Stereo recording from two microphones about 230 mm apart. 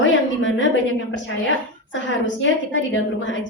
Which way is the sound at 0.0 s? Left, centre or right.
Left.